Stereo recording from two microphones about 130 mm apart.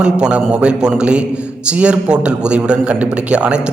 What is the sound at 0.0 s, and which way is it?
A man's voice, 5° right (ahead or behind).